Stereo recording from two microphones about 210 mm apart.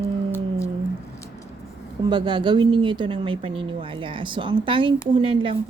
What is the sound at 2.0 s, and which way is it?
Speech, 20° right (ahead or behind).